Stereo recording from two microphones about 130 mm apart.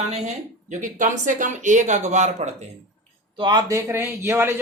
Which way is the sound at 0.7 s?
75° right (ahead or behind).